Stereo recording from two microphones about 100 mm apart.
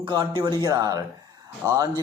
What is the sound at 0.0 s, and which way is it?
Speech, 55° right (ahead or behind).